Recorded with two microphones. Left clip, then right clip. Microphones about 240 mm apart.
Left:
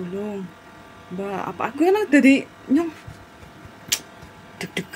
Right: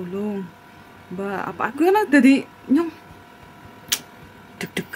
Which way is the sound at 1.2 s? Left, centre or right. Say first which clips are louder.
Right 1 dB; centre.